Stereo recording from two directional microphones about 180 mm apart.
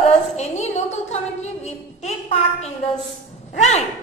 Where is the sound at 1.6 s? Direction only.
35° left (ahead or behind).